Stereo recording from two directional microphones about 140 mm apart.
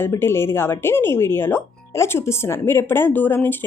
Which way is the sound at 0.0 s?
15° left (ahead or behind).